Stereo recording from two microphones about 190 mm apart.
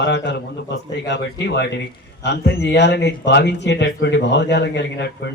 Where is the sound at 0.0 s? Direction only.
65° left (ahead or behind).